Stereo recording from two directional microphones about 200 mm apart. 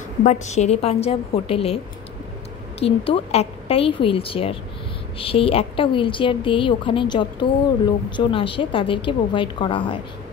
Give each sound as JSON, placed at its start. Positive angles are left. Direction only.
{"t": 0.2, "sound": "a woman's voice", "side_deg": 35}
{"t": 3.1, "sound": "a woman's voice", "side_deg": 30}